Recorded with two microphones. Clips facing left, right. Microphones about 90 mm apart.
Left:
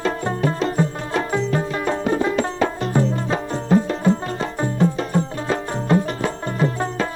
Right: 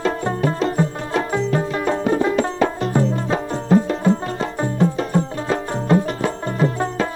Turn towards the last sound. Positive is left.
turn(degrees=-20)  # may be behind; listen again after turning